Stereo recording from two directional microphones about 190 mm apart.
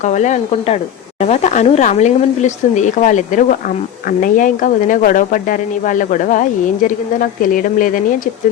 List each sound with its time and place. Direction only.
0.0 s speech: 40° left (ahead or behind)